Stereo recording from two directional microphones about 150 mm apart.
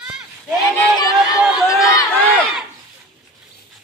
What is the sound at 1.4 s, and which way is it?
Run, 5° right (ahead or behind).